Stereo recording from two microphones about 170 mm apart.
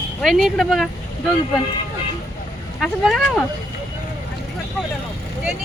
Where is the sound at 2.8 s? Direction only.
Centre (ahead or behind).